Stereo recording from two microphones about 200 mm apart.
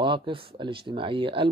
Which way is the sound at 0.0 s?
25° right (ahead or behind).